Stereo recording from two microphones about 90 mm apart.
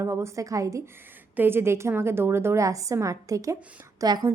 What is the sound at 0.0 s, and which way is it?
Speech, 35° right (ahead or behind).